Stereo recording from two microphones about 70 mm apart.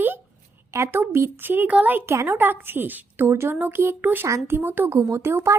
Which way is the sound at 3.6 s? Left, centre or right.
Right.